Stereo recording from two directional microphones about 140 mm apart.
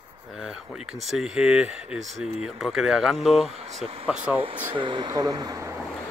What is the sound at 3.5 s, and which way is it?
Speech, 50° right (ahead or behind).